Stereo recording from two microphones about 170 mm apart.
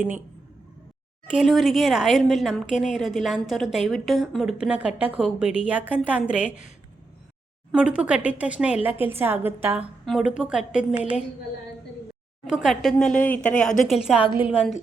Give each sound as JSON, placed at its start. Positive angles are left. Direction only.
{"t": 1.3, "sound": "a woman's voice", "side_deg": 0}
{"t": 7.7, "sound": "a woman's voice", "side_deg": -5}
{"t": 12.5, "sound": "a woman's voice", "side_deg": -5}